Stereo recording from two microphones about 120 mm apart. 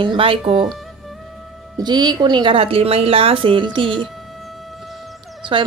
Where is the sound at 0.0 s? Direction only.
45° right (ahead or behind).